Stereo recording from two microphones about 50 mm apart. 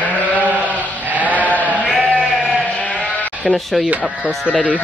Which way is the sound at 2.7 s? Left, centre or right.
Left.